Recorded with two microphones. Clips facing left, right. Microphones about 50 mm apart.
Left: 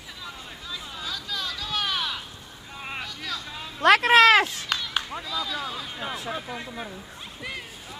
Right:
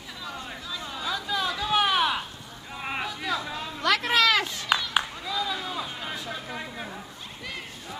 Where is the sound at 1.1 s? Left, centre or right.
Right.